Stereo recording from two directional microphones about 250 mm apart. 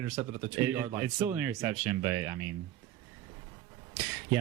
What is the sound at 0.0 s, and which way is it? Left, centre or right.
Speech, centre.